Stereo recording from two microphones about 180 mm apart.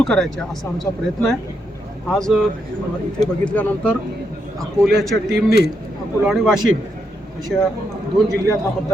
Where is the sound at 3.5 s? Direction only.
5° left (ahead or behind).